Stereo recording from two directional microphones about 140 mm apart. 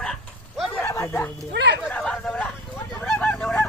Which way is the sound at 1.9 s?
5° left (ahead or behind).